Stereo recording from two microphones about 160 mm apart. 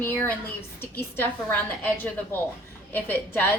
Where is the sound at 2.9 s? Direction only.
10° left (ahead or behind).